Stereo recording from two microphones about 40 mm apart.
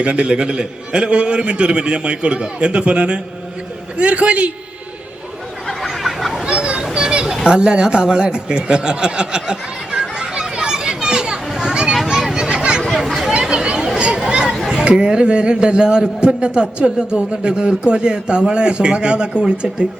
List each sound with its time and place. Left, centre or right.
0.0 s a man's voice: right
5.6 s a sound: centre
6.4 s a sound: right
6.9 s children playing: right
7.4 s chuckle: right
11.5 s children playing: right
12.0 s a sound: centre
13.5 s chatter: right
14.7 s a man's voice: right